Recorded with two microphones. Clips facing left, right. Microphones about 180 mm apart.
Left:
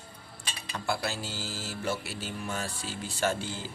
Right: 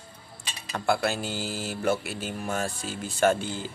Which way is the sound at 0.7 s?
55° right (ahead or behind).